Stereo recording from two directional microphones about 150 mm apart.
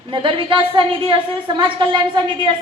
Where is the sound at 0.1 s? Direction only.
35° right (ahead or behind).